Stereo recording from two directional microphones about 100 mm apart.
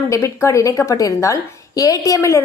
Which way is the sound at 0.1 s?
30° left (ahead or behind).